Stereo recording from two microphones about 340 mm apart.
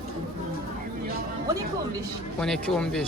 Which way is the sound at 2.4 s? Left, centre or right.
Centre.